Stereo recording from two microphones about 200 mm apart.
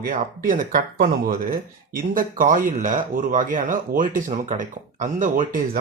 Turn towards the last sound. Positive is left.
turn(degrees=-40)  # may be behind; listen again after turning